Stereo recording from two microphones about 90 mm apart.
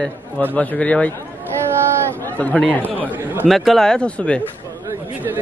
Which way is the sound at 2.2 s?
15° left (ahead or behind).